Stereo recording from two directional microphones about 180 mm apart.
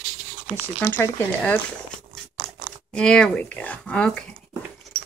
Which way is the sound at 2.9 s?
5° left (ahead or behind).